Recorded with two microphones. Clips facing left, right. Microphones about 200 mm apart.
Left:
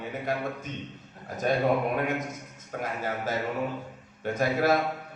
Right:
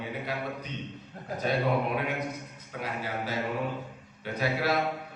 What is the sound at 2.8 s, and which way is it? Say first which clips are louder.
A man's voice: left 2 dB; 45° left (ahead or behind).